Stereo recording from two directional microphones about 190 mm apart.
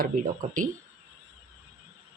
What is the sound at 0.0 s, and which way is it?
Speech, 45° right (ahead or behind).